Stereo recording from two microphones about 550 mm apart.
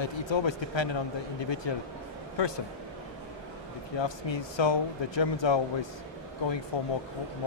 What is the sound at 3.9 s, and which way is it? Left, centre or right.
Speech, left.